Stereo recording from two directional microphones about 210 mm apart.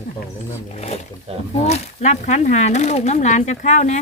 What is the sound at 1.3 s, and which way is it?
Speech, 30° right (ahead or behind).